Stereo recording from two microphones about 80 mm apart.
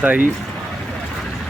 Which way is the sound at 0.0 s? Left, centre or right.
Right.